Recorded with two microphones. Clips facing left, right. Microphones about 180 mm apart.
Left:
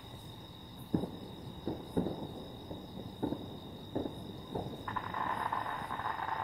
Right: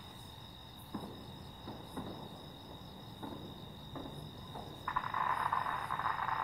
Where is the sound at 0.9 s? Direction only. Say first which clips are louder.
Left 11 dB; 55° left (ahead or behind).